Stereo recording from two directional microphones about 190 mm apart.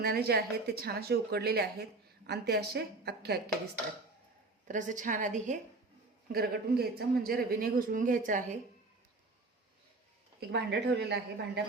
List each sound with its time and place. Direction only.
0.0 s a woman's voice: 55° right (ahead or behind)
4.7 s a woman's voice: 40° right (ahead or behind)
6.3 s a man's voice: 55° right (ahead or behind)
10.5 s a woman's voice: 60° right (ahead or behind)